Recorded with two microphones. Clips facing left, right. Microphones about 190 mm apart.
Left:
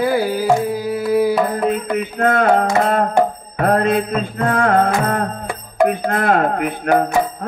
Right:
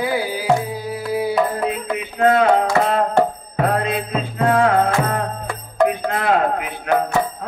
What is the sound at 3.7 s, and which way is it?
Mantra, 50° left (ahead or behind).